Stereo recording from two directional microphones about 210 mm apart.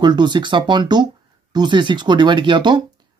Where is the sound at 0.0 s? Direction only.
20° right (ahead or behind).